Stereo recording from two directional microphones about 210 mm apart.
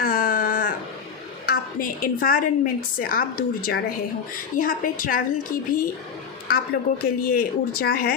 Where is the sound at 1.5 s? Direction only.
40° left (ahead or behind).